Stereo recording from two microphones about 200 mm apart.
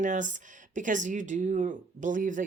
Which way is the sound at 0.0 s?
40° right (ahead or behind).